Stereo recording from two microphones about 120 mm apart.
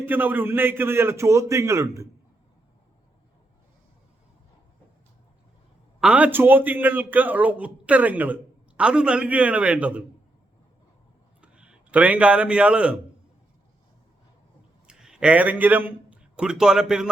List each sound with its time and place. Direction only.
0.0 s a man's voice: 15° right (ahead or behind)
6.0 s a man's voice: 10° right (ahead or behind)
11.3 s a man's voice: 10° right (ahead or behind)
14.8 s a man's voice: 5° right (ahead or behind)